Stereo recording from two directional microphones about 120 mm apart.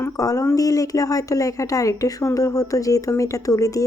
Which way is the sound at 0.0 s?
30° left (ahead or behind).